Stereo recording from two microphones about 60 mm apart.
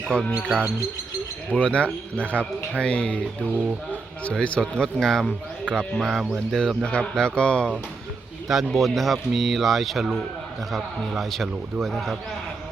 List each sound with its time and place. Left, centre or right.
0.1 s speech: centre
1.5 s speech: left
4.4 s speech: centre
5.6 s speech: centre
6.1 s speech: centre
6.5 s a man's voice: centre
6.8 s speech: centre
8.4 s a man's voice: centre